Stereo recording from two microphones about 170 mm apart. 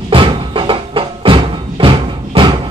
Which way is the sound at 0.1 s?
30° right (ahead or behind).